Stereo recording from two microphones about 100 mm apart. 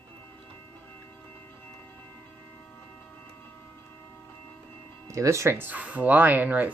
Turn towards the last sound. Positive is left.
turn(degrees=-15)  # may be behind; listen again after turning